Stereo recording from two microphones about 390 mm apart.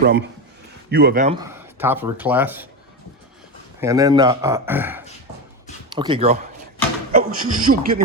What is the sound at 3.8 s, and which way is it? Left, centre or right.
A man's voice, centre.